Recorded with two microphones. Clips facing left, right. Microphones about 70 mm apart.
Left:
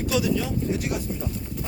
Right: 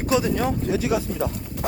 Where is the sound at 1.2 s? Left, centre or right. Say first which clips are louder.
Right 5 dB; right.